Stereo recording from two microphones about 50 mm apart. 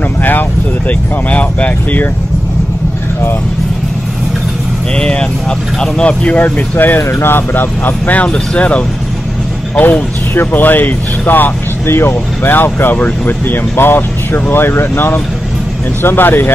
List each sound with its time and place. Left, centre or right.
0.2 s speech: left
4.9 s speech: centre
6.2 s speech: left
7.0 s speech: left
10.5 s speech: left